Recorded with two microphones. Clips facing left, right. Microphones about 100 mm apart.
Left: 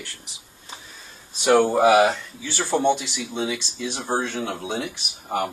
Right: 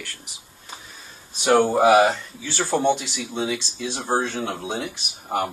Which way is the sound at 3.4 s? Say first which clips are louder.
Right 1 dB; 25° right (ahead or behind).